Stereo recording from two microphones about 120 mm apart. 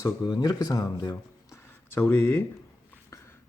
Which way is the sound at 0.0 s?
30° left (ahead or behind).